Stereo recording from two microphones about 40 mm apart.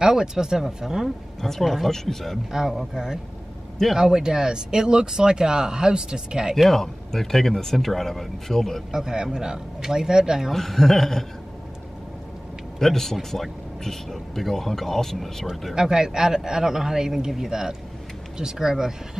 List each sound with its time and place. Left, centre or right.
0.0 s speech: centre
1.4 s a man's voice: centre
2.5 s speech: centre
6.7 s speech: centre
8.9 s speech: centre
10.5 s a man's voice: centre
12.7 s a man's voice: centre
15.7 s speech: centre